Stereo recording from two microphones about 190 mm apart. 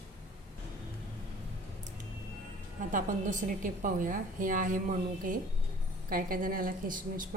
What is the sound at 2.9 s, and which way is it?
A woman's voice, 45° right (ahead or behind).